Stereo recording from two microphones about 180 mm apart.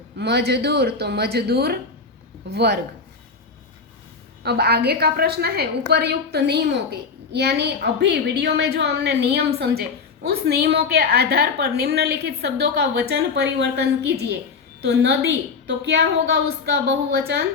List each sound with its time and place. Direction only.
0.2 s a woman's voice: 65° right (ahead or behind)
4.4 s a woman's voice: 60° right (ahead or behind)